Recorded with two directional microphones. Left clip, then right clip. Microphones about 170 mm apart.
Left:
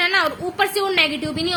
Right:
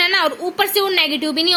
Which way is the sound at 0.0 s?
50° right (ahead or behind).